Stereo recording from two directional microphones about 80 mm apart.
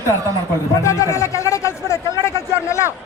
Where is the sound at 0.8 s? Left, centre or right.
Left.